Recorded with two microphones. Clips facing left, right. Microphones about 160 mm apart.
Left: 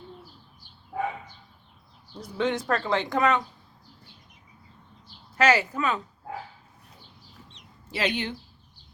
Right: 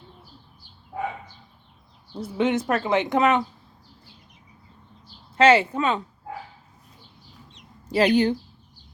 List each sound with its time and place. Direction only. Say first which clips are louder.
2.1 s speech: right 4 dB; 25° right (ahead or behind)
5.4 s speech: right 5 dB; 30° right (ahead or behind)
7.9 s speech: right 10 dB; 40° right (ahead or behind)